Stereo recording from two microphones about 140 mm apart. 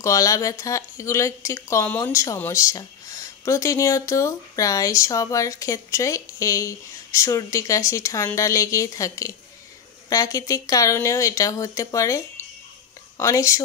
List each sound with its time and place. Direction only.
0.0 s speech: 25° left (ahead or behind)